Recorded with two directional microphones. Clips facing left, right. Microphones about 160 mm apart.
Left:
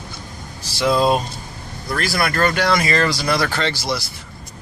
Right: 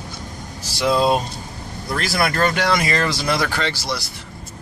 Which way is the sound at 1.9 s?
25° right (ahead or behind).